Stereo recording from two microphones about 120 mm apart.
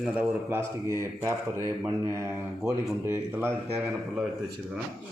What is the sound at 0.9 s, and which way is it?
Speech, 25° right (ahead or behind).